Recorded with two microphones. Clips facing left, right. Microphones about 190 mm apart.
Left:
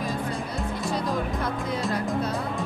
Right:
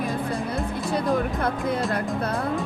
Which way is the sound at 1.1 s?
55° right (ahead or behind).